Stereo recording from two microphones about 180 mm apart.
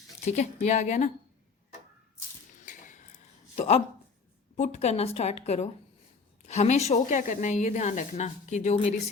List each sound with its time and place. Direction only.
0.3 s a woman's voice: 40° left (ahead or behind)
2.6 s a sound: 45° left (ahead or behind)
3.5 s a woman's voice: 35° left (ahead or behind)